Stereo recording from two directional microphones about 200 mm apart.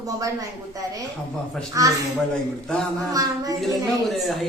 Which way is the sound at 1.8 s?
15° right (ahead or behind).